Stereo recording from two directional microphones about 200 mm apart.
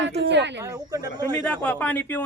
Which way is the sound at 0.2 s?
60° right (ahead or behind).